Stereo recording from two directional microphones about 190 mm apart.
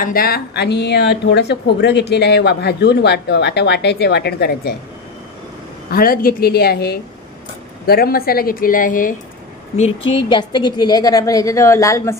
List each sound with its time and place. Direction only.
0.0 s speech: 50° left (ahead or behind)
5.9 s speech: 50° left (ahead or behind)
9.8 s a woman's voice: 30° left (ahead or behind); by 12.2 s 15° left (ahead or behind)